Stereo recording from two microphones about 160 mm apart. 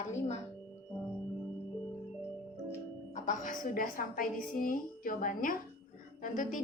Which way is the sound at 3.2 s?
55° left (ahead or behind).